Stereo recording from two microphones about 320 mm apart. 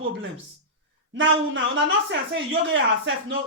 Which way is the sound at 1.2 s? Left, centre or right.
Right.